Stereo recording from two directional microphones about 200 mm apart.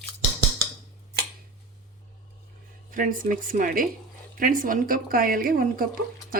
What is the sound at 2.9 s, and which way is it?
A woman's voice, 45° right (ahead or behind).